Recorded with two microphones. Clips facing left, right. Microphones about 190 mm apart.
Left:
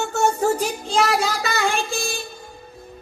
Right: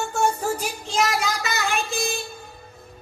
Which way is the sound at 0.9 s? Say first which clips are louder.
Left 3 dB; 30° left (ahead or behind).